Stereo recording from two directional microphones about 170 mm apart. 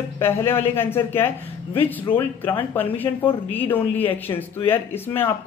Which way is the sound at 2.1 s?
30° left (ahead or behind).